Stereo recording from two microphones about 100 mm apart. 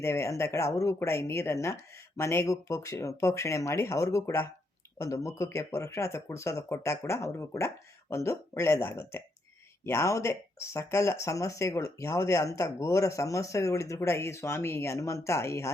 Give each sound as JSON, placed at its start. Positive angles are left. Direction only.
{"t": 0.0, "sound": "speech", "side_deg": 25}